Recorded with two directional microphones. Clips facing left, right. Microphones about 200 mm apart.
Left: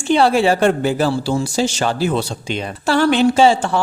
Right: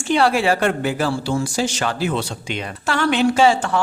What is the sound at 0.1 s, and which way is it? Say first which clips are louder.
Speech: left 3 dB; 25° left (ahead or behind).